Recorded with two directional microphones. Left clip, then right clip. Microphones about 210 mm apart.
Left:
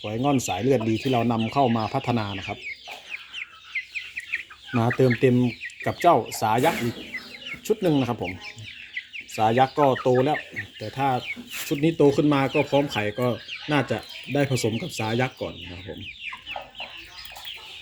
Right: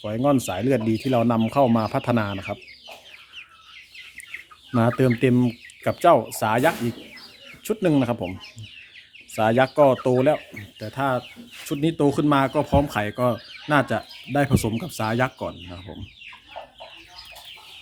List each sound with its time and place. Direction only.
0.0 s speech: 20° right (ahead or behind)
4.9 s speech: 25° right (ahead or behind)
9.3 s speech: 25° right (ahead or behind)